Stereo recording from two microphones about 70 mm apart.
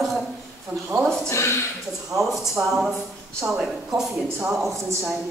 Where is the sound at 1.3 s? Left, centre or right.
Left.